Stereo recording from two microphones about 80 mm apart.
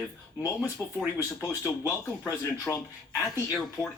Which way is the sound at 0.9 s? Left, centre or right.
Left.